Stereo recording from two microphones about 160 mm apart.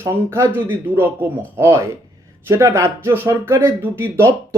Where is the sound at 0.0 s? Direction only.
15° right (ahead or behind).